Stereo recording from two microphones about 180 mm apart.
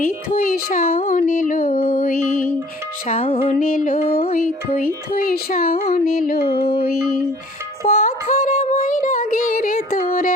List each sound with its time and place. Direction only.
0.0 s speech: 50° left (ahead or behind)
3.1 s music: 35° left (ahead or behind)
3.5 s speech: 50° left (ahead or behind)
5.8 s music: 55° left (ahead or behind)
7.9 s speech: 45° left (ahead or behind)